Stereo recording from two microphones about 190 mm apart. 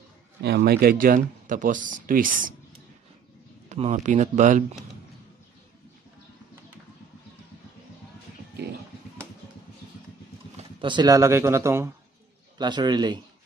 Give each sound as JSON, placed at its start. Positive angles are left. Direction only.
{"t": 0.4, "sound": "speech", "side_deg": -60}
{"t": 3.6, "sound": "speech", "side_deg": -35}
{"t": 10.8, "sound": "a man's voice", "side_deg": -25}